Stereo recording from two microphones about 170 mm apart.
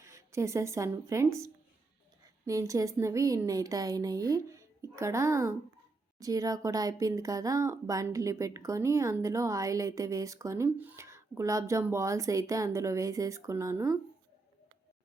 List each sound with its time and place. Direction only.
0.0 s speech: 20° right (ahead or behind)